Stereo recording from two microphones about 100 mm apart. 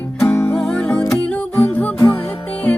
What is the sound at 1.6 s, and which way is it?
Music, 15° left (ahead or behind).